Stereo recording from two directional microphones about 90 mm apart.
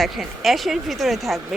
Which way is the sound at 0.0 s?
Centre (ahead or behind).